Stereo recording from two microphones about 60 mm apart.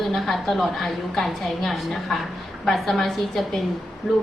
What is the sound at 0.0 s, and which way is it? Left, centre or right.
A woman's voice, centre.